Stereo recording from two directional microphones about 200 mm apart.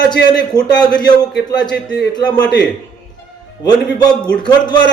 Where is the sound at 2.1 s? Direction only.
20° left (ahead or behind).